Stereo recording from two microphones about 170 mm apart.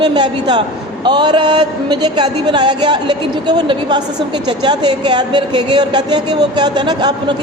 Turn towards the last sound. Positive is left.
turn(degrees=-25)  # may be behind; listen again after turning